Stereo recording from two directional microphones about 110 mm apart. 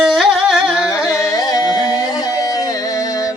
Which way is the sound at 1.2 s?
30° left (ahead or behind).